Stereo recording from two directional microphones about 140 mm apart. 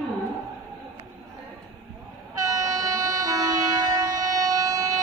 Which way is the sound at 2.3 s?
25° right (ahead or behind).